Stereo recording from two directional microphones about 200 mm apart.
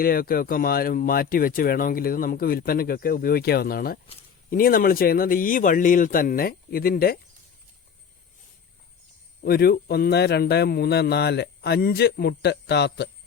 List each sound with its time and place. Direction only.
0.0 s speech: 45° left (ahead or behind)
9.4 s speech: 50° left (ahead or behind)